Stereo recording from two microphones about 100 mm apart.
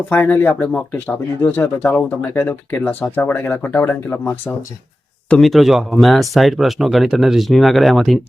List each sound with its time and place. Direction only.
0.1 s speech: 20° left (ahead or behind)
5.4 s speech: centre (ahead or behind)